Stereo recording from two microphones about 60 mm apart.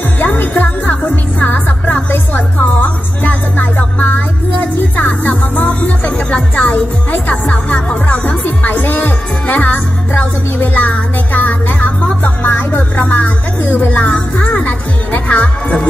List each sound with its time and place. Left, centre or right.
0.2 s music: left